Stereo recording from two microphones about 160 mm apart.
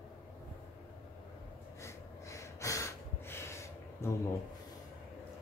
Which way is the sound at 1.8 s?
20° left (ahead or behind).